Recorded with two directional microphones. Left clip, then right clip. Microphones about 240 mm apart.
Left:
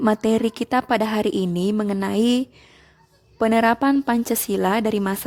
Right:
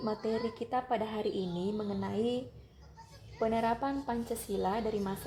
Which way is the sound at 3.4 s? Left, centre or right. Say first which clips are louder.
Left 13 dB; left.